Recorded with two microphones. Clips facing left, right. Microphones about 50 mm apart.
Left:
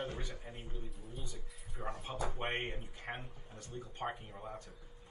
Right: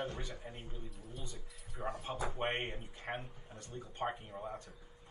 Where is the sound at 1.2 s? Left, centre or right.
Right.